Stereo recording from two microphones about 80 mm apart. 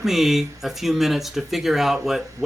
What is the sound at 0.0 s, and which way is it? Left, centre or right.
Speech, centre.